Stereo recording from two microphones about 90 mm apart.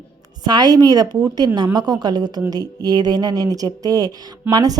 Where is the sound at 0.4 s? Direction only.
50° right (ahead or behind).